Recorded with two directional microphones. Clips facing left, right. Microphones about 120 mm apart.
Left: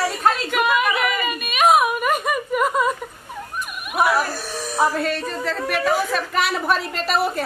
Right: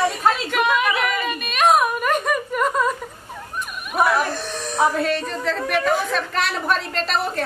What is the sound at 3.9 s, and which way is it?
Speech, 5° left (ahead or behind).